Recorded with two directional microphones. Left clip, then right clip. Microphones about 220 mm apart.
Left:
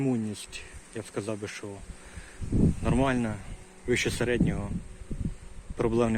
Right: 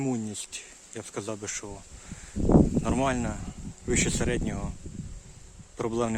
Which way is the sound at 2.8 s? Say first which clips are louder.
Even; 10° right (ahead or behind).